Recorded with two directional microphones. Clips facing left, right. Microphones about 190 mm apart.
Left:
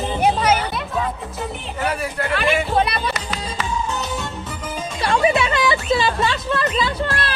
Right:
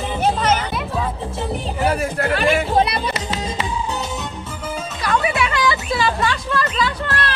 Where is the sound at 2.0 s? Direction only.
40° right (ahead or behind).